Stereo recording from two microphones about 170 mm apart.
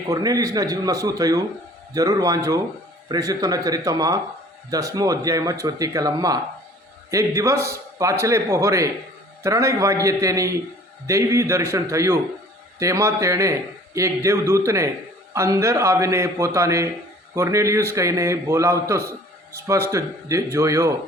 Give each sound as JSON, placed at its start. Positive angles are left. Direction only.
{"t": 0.1, "sound": "a man's voice", "side_deg": -20}